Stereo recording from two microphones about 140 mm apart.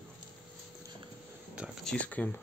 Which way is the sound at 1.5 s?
5° right (ahead or behind).